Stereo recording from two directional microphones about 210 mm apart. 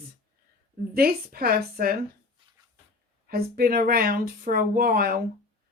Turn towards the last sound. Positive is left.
turn(degrees=-45)  # may be behind; listen again after turning